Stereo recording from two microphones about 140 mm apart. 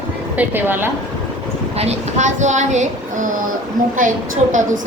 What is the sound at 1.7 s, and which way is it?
Speech, 55° right (ahead or behind).